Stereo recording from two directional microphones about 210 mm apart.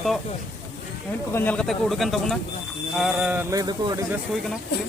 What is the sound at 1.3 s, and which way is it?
Speech, 10° left (ahead or behind).